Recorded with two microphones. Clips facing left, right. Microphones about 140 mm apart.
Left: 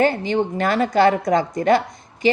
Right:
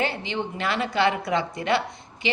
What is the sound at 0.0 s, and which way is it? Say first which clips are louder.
A woman's voice: left 9 dB; 45° left (ahead or behind).